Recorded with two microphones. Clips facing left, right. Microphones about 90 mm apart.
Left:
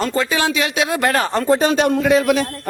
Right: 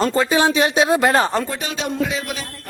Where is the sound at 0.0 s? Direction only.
20° right (ahead or behind).